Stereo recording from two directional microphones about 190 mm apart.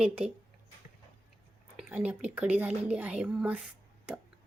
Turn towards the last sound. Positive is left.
turn(degrees=-5)  # may be behind; listen again after turning